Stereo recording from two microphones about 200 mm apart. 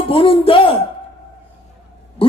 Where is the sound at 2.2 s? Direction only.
30° left (ahead or behind).